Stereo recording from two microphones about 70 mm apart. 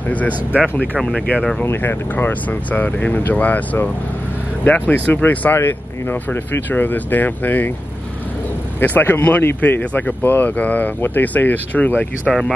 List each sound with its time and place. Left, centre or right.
0.3 s speech: right
1.6 s speech: left
8.7 s speech: left
12.3 s speech: centre